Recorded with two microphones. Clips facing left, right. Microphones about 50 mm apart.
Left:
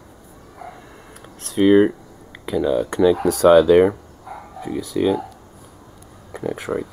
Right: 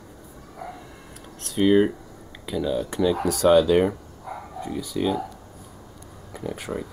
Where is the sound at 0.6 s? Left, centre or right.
Centre.